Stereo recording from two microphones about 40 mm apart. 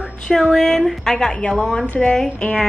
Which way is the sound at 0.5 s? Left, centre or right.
Centre.